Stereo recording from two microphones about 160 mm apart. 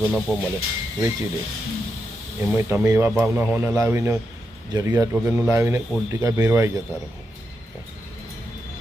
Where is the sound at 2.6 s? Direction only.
20° right (ahead or behind).